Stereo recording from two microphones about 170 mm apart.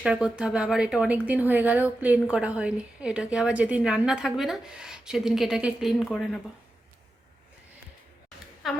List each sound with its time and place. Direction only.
0.0 s a woman's voice: 5° right (ahead or behind)
8.6 s speech: centre (ahead or behind)